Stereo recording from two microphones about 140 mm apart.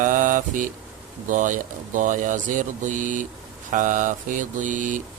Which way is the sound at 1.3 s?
70° right (ahead or behind).